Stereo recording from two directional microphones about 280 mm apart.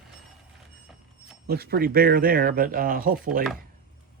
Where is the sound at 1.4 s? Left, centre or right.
Right.